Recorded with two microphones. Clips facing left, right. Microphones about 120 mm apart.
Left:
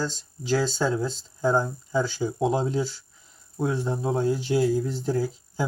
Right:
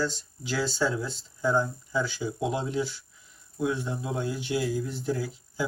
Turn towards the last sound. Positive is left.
turn(degrees=35)  # may be behind; listen again after turning